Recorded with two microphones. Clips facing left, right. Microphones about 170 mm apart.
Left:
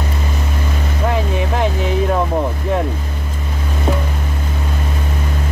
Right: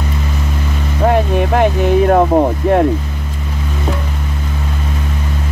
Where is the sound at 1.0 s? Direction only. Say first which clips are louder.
Right 7 dB; 60° right (ahead or behind).